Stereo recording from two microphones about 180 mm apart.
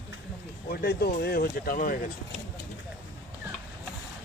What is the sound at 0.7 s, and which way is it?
Speech, 60° left (ahead or behind).